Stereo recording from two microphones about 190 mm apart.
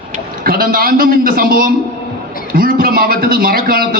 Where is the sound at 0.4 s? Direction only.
50° right (ahead or behind).